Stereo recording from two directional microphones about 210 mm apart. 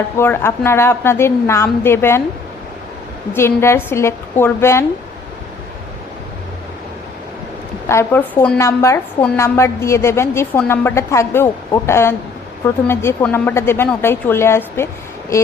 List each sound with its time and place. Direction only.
0.2 s a woman's voice: 10° left (ahead or behind)
3.3 s a woman's voice: 10° left (ahead or behind)
7.9 s a woman's voice: 10° left (ahead or behind)